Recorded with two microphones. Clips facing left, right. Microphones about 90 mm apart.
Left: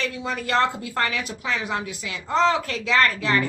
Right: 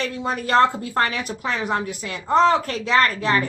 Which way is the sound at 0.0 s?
45° right (ahead or behind).